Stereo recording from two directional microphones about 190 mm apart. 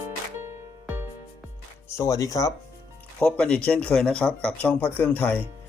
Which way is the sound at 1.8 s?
15° left (ahead or behind).